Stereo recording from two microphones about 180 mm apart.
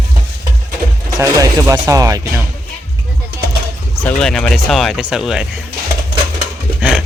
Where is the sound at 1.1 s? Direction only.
15° right (ahead or behind).